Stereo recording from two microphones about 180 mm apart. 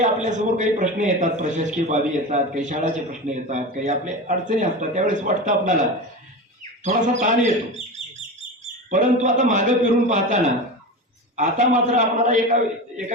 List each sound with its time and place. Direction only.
0.0 s a man's voice: 40° right (ahead or behind)
6.8 s a man's voice: 40° right (ahead or behind)
8.9 s a man's voice: 45° right (ahead or behind)